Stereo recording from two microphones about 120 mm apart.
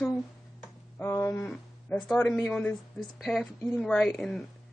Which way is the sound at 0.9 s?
25° left (ahead or behind).